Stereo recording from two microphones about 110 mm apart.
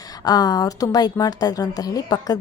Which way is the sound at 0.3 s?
35° left (ahead or behind).